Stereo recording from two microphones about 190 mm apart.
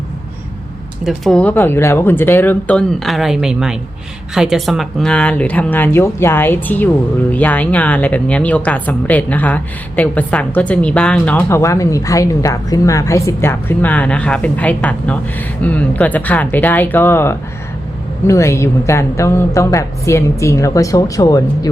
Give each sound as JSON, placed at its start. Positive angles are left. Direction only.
{"t": 1.0, "sound": "speech", "side_deg": 0}